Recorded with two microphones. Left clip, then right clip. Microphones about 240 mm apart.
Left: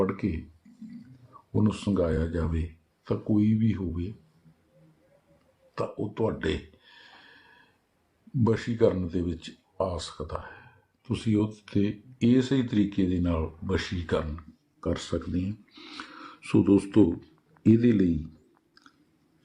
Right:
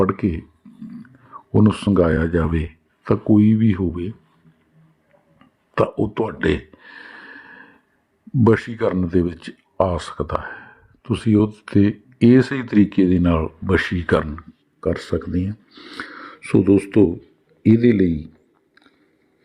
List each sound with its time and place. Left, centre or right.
0.0 s speech: right
1.5 s speech: right
5.7 s a sound: right
8.4 s speech: right